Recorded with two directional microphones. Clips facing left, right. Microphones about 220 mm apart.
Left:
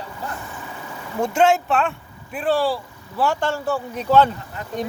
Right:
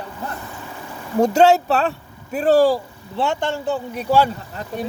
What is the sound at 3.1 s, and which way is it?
Speech, 25° right (ahead or behind).